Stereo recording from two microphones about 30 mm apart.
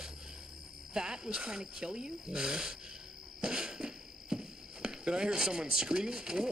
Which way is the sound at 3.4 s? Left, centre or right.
Right.